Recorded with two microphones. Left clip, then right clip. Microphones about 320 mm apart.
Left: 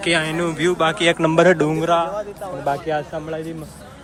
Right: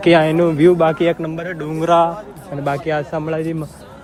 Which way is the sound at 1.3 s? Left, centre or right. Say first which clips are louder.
Left 11 dB; centre.